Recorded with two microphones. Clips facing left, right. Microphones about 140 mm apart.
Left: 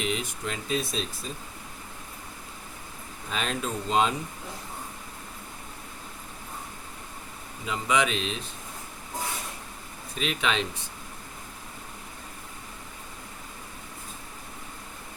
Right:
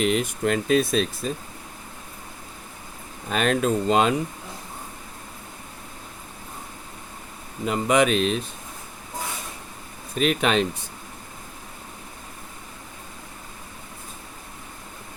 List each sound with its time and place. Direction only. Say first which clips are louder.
0.0 s speech: right 8 dB; 55° right (ahead or behind)
3.2 s speech: right 9 dB; 60° right (ahead or behind)
7.6 s speech: right 6 dB; 50° right (ahead or behind)
10.2 s speech: right 7 dB; 50° right (ahead or behind)